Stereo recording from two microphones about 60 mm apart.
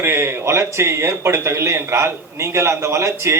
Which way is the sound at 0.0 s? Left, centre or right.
Right.